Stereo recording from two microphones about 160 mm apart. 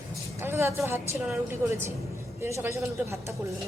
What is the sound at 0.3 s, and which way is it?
Vehicle, 15° right (ahead or behind).